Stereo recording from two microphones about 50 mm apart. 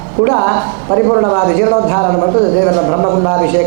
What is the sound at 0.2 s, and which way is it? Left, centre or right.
Speech, right.